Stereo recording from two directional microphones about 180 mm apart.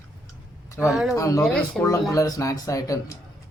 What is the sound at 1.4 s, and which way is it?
Speech, 5° left (ahead or behind).